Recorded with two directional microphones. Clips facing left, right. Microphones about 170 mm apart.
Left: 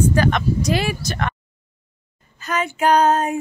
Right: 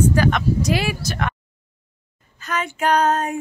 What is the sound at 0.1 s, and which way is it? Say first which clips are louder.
Speech: even; 5° right (ahead or behind).